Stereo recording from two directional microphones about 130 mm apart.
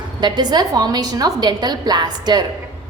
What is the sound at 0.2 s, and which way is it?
A woman's voice, 35° right (ahead or behind).